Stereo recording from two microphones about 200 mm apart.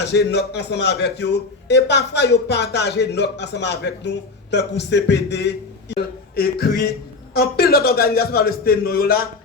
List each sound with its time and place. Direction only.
0.0 s a man's voice: 55° left (ahead or behind)